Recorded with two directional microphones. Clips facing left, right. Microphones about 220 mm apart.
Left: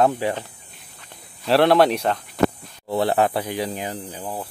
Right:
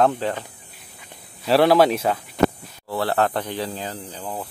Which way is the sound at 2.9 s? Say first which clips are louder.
Left 2 dB; 20° left (ahead or behind).